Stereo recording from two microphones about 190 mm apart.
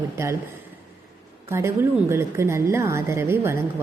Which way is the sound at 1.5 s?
15° right (ahead or behind).